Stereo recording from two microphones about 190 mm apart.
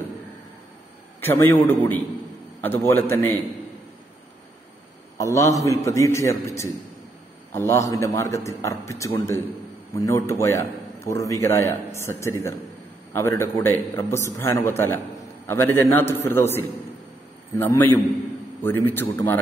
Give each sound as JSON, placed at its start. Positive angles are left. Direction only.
{"t": 1.2, "sound": "a man's voice", "side_deg": 10}
{"t": 5.1, "sound": "a man's voice", "side_deg": 15}